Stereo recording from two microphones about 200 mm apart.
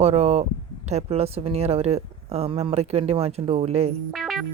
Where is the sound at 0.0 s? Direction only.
30° right (ahead or behind).